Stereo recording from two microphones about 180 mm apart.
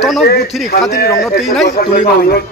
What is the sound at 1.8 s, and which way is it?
Speech, 60° left (ahead or behind).